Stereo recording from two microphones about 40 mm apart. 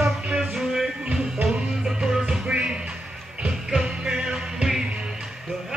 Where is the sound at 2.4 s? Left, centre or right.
Right.